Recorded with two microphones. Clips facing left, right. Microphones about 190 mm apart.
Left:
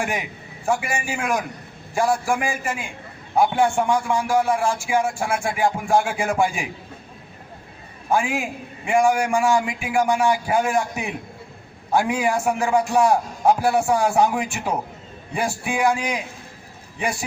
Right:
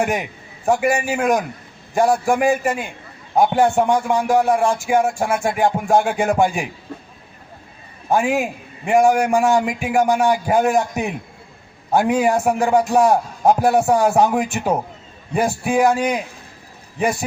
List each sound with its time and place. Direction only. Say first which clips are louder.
0.0 s speech: right 5 dB; 40° right (ahead or behind)
8.1 s speech: right 4 dB; 40° right (ahead or behind)